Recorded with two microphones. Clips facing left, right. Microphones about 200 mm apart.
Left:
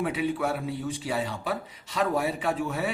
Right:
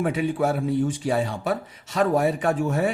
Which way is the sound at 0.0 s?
45° right (ahead or behind).